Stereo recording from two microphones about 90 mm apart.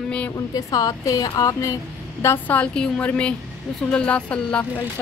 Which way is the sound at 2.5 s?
10° left (ahead or behind).